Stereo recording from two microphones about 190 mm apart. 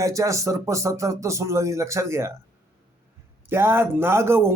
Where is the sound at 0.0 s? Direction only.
15° right (ahead or behind).